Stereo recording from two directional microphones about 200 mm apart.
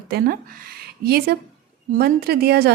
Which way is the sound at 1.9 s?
50° right (ahead or behind).